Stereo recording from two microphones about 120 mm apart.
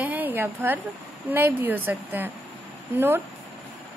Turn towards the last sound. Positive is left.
turn(degrees=-20)  # may be behind; listen again after turning